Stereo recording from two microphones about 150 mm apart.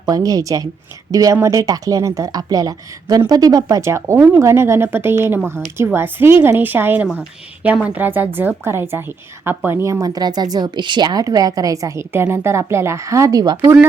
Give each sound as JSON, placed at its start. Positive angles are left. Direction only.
{"t": 0.0, "sound": "a woman's voice", "side_deg": -25}